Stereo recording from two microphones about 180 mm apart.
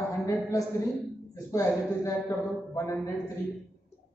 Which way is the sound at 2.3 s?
15° left (ahead or behind).